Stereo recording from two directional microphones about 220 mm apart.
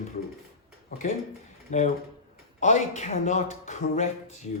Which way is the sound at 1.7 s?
35° left (ahead or behind).